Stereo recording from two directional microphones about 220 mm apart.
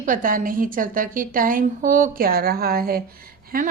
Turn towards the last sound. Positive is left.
turn(degrees=-40)  # may be behind; listen again after turning